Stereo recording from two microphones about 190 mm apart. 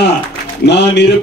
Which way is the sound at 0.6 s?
65° left (ahead or behind).